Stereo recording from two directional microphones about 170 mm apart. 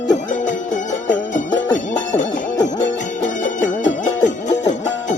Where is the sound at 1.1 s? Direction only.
45° left (ahead or behind).